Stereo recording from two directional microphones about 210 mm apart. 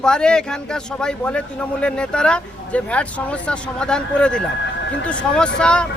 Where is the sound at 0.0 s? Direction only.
5° left (ahead or behind).